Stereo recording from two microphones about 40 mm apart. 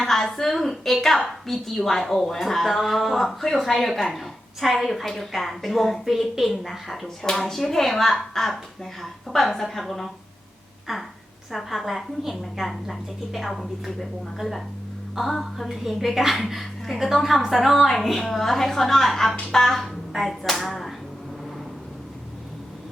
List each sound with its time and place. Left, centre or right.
0.0 s a woman's voice: centre
7.2 s a woman's voice: centre
11.5 s a woman's voice: centre